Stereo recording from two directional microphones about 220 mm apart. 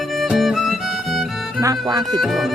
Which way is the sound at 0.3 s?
Centre (ahead or behind).